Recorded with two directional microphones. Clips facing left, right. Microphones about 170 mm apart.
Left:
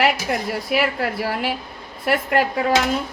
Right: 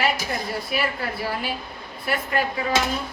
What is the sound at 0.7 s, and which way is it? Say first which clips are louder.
A woman's voice: left 8 dB; 85° left.